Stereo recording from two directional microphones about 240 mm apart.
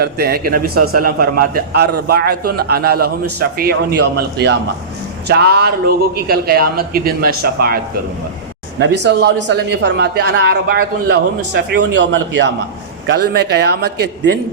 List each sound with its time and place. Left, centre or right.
0.0 s a man's voice: right
8.8 s a man's voice: right